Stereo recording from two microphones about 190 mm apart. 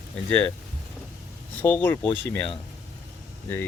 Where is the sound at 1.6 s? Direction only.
10° left (ahead or behind).